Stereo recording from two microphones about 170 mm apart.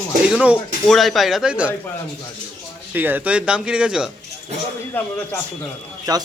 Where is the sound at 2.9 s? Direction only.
10° right (ahead or behind).